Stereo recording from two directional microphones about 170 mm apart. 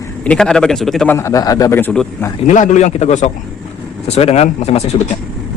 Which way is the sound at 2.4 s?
45° left (ahead or behind).